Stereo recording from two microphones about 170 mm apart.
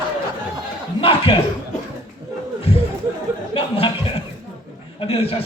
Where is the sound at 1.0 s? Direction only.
35° left (ahead or behind).